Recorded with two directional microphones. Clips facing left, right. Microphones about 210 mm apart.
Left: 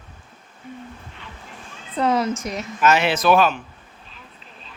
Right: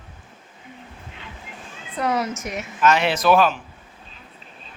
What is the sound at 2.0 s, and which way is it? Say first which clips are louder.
Speech: left 3 dB; 25° left (ahead or behind).